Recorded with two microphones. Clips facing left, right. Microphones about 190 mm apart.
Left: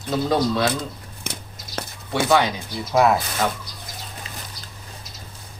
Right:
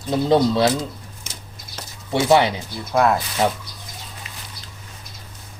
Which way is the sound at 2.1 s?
25° right (ahead or behind).